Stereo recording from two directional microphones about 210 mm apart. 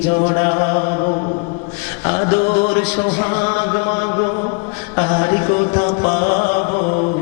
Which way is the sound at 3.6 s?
25° left (ahead or behind).